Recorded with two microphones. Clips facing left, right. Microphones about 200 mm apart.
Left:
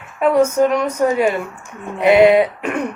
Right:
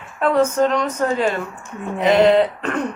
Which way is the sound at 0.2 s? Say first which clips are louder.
Left 3 dB; 10° left (ahead or behind).